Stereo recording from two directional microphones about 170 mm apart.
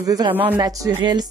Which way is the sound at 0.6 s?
25° right (ahead or behind).